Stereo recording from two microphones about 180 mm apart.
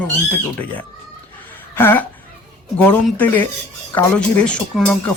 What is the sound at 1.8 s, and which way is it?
Speech, 10° left (ahead or behind).